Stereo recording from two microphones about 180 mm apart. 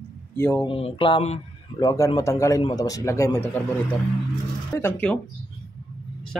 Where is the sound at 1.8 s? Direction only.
20° left (ahead or behind).